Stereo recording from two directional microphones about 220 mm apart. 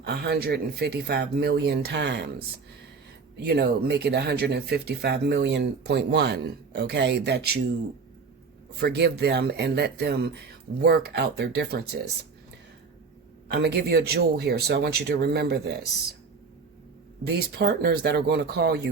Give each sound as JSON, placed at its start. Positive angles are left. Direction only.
{"t": 0.0, "sound": "speech", "side_deg": -45}
{"t": 3.4, "sound": "speech", "side_deg": -45}
{"t": 8.8, "sound": "speech", "side_deg": -50}
{"t": 13.5, "sound": "speech", "side_deg": -45}
{"t": 17.6, "sound": "speech", "side_deg": -45}